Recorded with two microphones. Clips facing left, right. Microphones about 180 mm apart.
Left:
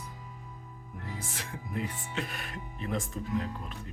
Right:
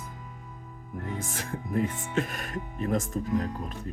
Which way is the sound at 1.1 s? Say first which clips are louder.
Right 6 dB; 45° right (ahead or behind).